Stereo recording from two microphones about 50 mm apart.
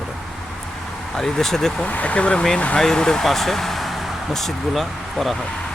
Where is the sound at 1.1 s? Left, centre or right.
Centre.